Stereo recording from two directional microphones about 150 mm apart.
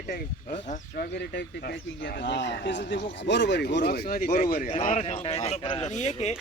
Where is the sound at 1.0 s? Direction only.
90° left.